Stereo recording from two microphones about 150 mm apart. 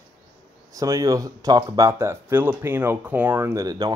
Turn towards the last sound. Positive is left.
turn(degrees=-25)  # may be behind; listen again after turning